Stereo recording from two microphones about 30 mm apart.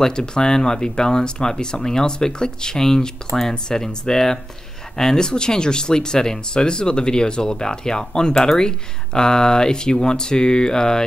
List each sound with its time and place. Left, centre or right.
0.0 s speech: left
3.8 s speech: centre